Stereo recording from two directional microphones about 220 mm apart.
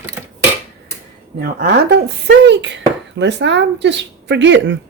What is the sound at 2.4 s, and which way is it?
Speech, 55° right (ahead or behind).